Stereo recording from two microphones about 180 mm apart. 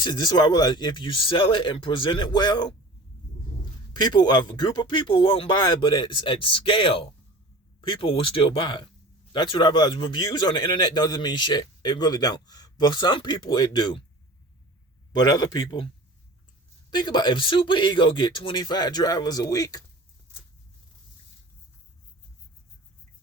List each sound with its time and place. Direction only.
0.0 s a man's voice: 25° left (ahead or behind)
3.9 s a man's voice: 25° left (ahead or behind)
15.1 s a man's voice: 25° left (ahead or behind)
16.9 s a man's voice: 25° left (ahead or behind)